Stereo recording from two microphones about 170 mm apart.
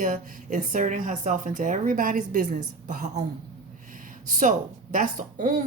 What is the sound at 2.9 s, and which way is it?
Speech, 45° right (ahead or behind).